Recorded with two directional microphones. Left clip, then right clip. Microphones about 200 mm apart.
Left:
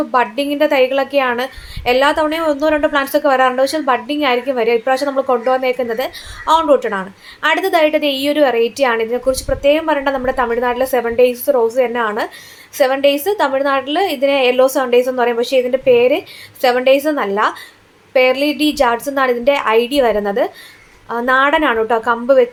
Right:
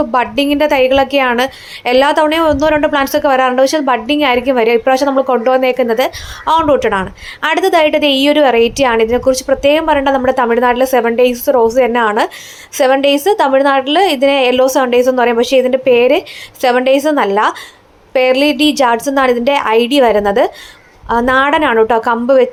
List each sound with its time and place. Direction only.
0.1 s a woman's voice: 30° right (ahead or behind)